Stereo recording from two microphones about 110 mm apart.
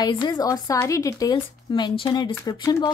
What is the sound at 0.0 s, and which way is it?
Speech, 40° left (ahead or behind).